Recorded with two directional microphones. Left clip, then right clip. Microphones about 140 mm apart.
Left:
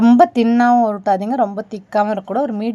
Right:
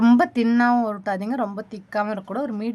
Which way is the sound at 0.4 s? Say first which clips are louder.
Left 7 dB; 10° left (ahead or behind).